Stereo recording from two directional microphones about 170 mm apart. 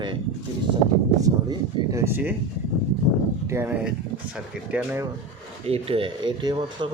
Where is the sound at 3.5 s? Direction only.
15° right (ahead or behind).